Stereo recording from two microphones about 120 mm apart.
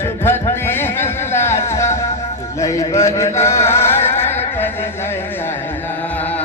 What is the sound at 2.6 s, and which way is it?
Speech, 25° left (ahead or behind).